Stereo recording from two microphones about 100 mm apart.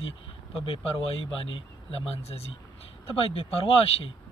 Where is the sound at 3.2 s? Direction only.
65° left (ahead or behind).